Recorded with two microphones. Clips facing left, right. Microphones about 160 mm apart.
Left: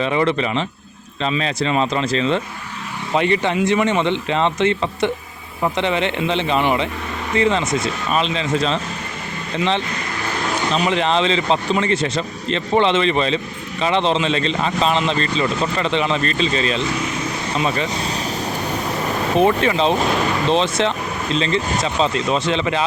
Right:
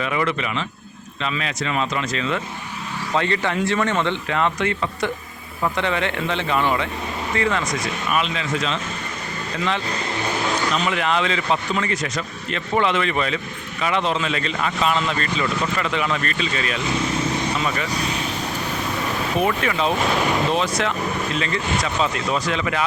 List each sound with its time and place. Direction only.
0.0 s speech: 30° left (ahead or behind)
3.1 s speech: 20° left (ahead or behind)
10.8 s speech: 25° left (ahead or behind)
19.4 s speech: 30° left (ahead or behind)